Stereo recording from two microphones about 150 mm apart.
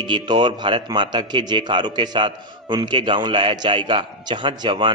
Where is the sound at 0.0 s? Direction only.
30° right (ahead or behind).